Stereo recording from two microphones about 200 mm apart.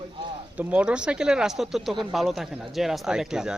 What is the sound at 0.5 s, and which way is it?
Speech, 5° right (ahead or behind).